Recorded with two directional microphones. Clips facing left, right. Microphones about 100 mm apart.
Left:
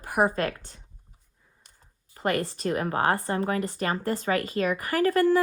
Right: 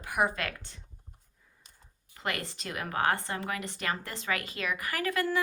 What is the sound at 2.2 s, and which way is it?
A woman's voice, 40° left (ahead or behind).